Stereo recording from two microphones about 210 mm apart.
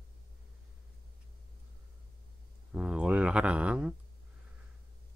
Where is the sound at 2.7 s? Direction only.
5° right (ahead or behind).